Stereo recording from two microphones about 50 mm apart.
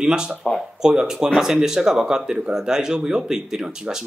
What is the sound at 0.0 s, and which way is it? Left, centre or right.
A man's voice, centre.